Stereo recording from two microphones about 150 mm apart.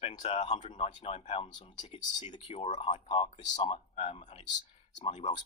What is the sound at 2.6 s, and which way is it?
Speech, 50° left (ahead or behind).